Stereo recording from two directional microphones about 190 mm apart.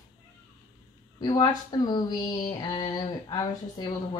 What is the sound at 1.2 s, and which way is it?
Speech, 20° left (ahead or behind).